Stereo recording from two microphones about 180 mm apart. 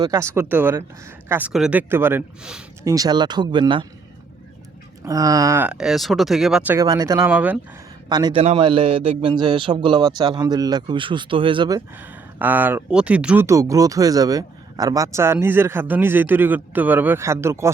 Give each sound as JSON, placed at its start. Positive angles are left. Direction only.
{"t": 0.0, "sound": "speech", "side_deg": -15}
{"t": 2.8, "sound": "a man's voice", "side_deg": -20}
{"t": 5.0, "sound": "speech", "side_deg": -20}
{"t": 8.1, "sound": "a man's voice", "side_deg": -25}
{"t": 11.9, "sound": "speech", "side_deg": -10}